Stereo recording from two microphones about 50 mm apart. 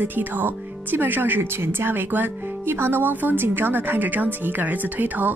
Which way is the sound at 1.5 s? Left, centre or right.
Right.